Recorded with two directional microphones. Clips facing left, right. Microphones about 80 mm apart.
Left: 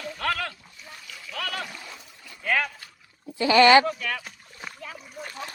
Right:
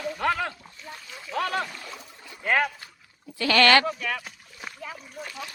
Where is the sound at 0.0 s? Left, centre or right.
Centre.